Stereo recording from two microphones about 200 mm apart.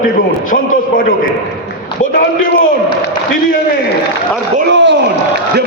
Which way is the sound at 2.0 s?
45° left (ahead or behind).